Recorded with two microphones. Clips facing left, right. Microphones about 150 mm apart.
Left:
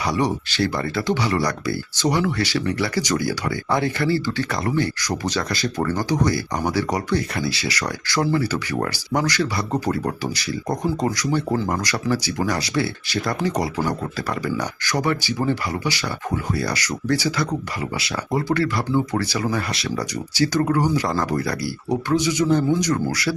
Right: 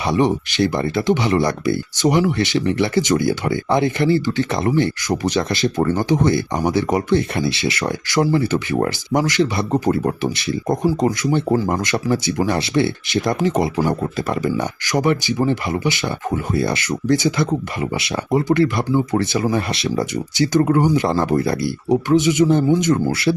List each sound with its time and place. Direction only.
0.0 s speech: 25° right (ahead or behind)